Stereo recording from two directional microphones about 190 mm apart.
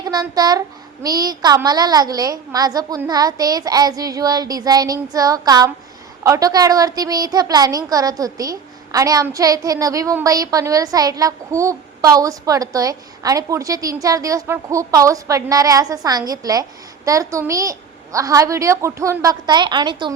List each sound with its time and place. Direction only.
0.0 s a child's voice: 20° right (ahead or behind)